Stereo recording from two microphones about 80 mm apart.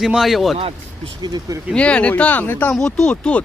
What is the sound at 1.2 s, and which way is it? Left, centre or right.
Speech, right.